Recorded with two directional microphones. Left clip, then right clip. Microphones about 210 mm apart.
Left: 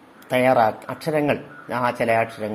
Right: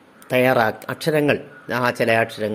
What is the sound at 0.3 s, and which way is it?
Speech, 40° right (ahead or behind).